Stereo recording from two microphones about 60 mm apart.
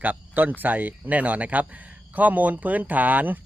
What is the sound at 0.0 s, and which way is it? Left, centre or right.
Speech, right.